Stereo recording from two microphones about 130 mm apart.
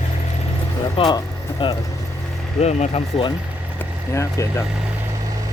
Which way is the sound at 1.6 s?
40° left (ahead or behind).